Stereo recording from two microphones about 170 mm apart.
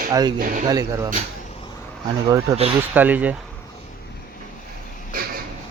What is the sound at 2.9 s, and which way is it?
Speech, 10° right (ahead or behind).